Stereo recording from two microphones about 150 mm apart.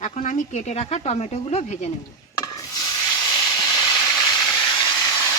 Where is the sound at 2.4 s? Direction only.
25° left (ahead or behind).